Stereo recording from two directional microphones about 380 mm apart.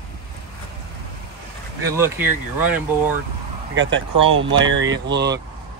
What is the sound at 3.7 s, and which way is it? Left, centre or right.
Speech, right.